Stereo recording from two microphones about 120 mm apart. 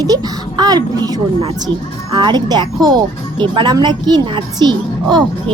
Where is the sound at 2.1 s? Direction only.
40° right (ahead or behind).